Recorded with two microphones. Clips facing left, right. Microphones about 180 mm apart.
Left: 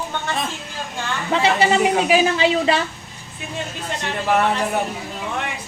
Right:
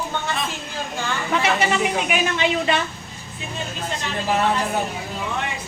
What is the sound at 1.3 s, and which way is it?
A woman's voice, 30° left (ahead or behind).